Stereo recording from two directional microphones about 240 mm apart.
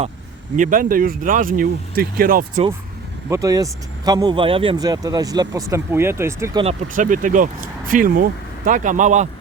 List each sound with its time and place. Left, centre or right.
0.5 s speech: right
3.2 s speech: centre
6.8 s speech: right